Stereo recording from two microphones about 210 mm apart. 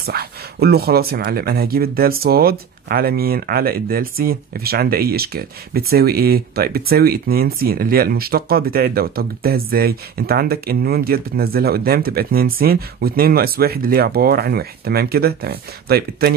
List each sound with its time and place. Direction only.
0.0 s speech: 45° right (ahead or behind)